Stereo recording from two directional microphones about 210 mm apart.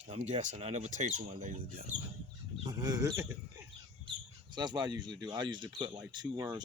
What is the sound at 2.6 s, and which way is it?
Speech, 20° right (ahead or behind).